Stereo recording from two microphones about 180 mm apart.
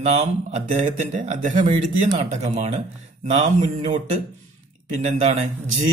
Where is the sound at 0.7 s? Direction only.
40° right (ahead or behind).